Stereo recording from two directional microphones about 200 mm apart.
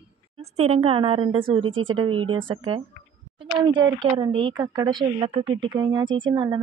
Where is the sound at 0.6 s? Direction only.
30° right (ahead or behind).